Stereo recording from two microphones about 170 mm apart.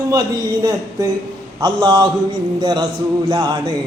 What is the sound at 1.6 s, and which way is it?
Speech, 25° right (ahead or behind).